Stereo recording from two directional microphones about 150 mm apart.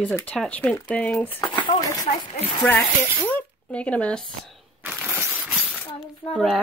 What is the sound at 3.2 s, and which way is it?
Speech, 10° left (ahead or behind).